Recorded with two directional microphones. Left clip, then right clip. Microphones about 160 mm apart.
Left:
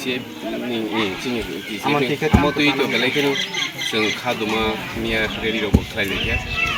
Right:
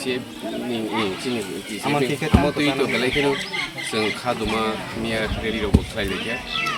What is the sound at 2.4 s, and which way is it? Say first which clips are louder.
Speech: left 3 dB; 5° right (ahead or behind).